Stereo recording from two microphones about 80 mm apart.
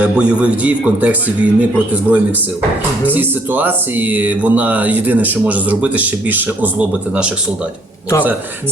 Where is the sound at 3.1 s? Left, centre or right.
Right.